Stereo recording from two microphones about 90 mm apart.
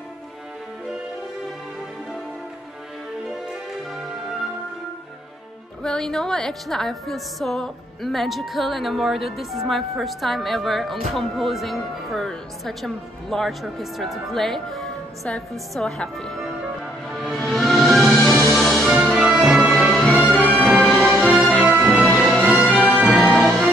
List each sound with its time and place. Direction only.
5.8 s speech: 5° left (ahead or behind)
16.0 s music: 5° left (ahead or behind)
18.9 s music: 10° right (ahead or behind)
20.2 s music: 20° left (ahead or behind)
20.6 s music: centre (ahead or behind)
21.5 s music: 15° right (ahead or behind)
21.8 s music: 5° right (ahead or behind)
22.6 s music: 15° right (ahead or behind)
23.0 s music: centre (ahead or behind)